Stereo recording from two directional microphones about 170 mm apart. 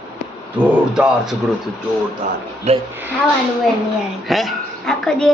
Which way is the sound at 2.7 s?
40° right (ahead or behind).